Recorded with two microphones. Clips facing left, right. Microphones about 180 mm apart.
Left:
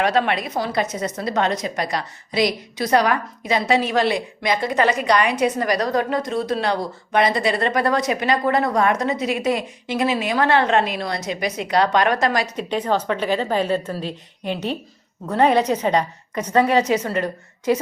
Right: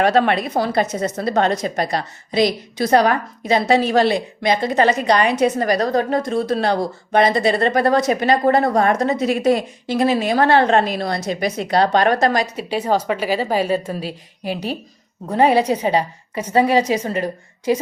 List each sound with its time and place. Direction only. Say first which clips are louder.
0.1 s a woman's voice: right 4 dB; 45° right (ahead or behind)
1.6 s a woman's voice: right 3 dB; 35° right (ahead or behind); by 6.4 s 50° right (ahead or behind)
6.6 s a woman's voice: right 3 dB; 35° right (ahead or behind)
12.5 s a woman's voice: right 2 dB; 10° right (ahead or behind)